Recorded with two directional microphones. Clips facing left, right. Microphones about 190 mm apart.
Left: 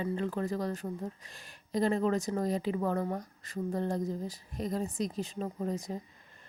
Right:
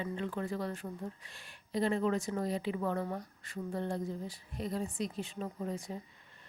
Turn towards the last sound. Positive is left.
turn(degrees=40)  # may be behind; listen again after turning